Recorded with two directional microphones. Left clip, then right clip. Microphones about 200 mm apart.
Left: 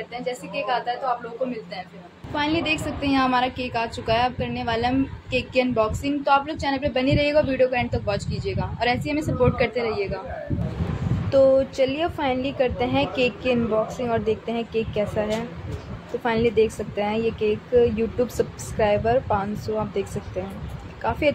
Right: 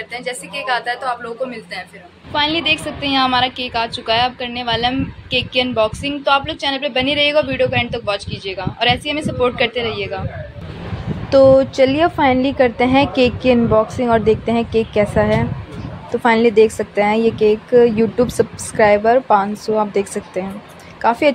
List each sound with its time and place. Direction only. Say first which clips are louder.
0.1 s a woman's voice: right 3 dB; centre (ahead or behind)
2.3 s a woman's voice: right 7 dB; centre (ahead or behind)
11.2 s a woman's voice: right 7 dB; 15° right (ahead or behind)